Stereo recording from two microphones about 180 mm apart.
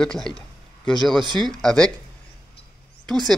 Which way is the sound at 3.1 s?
5° left (ahead or behind).